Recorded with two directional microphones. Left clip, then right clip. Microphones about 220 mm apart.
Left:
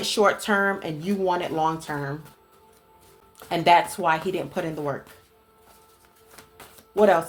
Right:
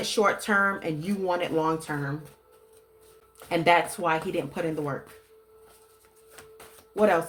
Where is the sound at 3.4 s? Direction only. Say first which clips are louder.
Left 3 dB; 25° left (ahead or behind).